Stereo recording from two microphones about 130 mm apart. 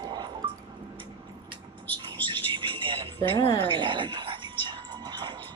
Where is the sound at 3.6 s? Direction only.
40° right (ahead or behind).